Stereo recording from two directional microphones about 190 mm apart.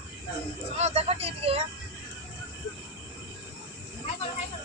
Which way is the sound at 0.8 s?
35° right (ahead or behind).